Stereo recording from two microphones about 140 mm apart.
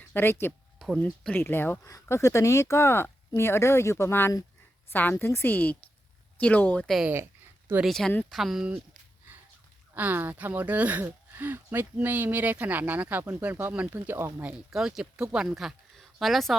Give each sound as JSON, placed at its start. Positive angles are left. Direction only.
{"t": 0.1, "sound": "speech", "side_deg": 15}
{"t": 0.8, "sound": "a woman's voice", "side_deg": 0}
{"t": 9.9, "sound": "speech", "side_deg": -15}
{"t": 14.7, "sound": "speech", "side_deg": -5}